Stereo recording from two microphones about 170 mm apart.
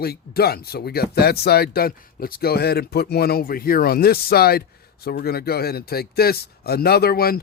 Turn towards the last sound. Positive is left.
turn(degrees=65)  # may be behind; listen again after turning